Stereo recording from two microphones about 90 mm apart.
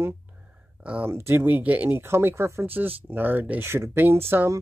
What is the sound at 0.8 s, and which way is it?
Speech, 15° right (ahead or behind).